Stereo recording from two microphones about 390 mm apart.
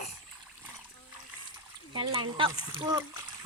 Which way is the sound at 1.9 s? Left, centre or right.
Centre.